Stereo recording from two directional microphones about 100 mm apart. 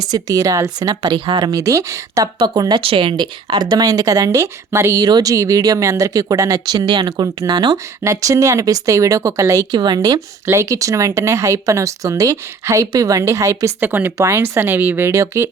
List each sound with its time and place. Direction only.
0.1 s speech: 40° right (ahead or behind)
1.2 s speech: 55° right (ahead or behind)
1.5 s speech: 35° right (ahead or behind)
2.8 s speech: 65° right (ahead or behind); by 7.8 s 45° right (ahead or behind)
8.0 s speech: 35° right (ahead or behind)
9.7 s speech: 45° right (ahead or behind)
13.7 s speech: 20° right (ahead or behind)